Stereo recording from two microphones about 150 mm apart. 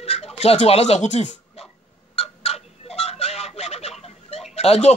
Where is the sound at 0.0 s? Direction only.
45° left (ahead or behind).